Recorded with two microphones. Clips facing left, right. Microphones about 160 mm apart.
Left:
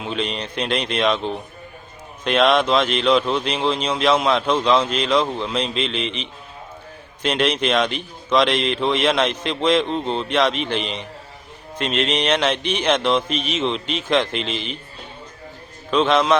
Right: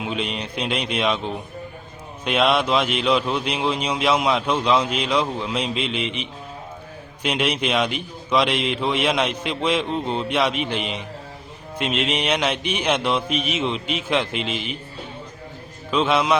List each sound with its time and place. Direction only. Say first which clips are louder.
0.0 s speech: left 1 dB; 10° right (ahead or behind)
15.9 s speech: left 2 dB; 10° right (ahead or behind)